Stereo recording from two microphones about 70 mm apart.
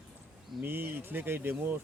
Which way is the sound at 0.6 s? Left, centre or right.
Right.